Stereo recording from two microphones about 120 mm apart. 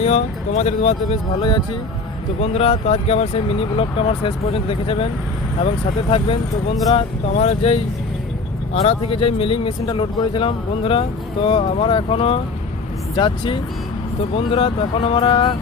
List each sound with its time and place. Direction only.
0.0 s speech: 65° left (ahead or behind)
1.4 s speech: 40° left (ahead or behind)
2.4 s speech: 55° left (ahead or behind); by 15.5 s 40° left (ahead or behind)